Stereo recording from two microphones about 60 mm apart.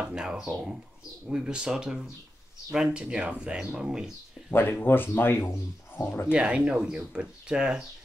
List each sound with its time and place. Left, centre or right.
0.1 s speech: centre
4.5 s speech: left
6.3 s speech: centre